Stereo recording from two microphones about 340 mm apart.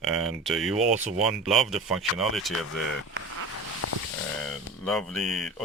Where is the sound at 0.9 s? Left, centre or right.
Right.